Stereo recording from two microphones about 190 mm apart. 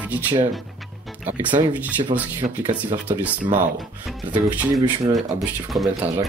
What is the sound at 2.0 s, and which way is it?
Speech, 25° right (ahead or behind).